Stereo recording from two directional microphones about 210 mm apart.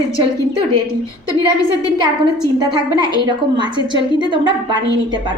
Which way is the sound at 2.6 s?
20° right (ahead or behind).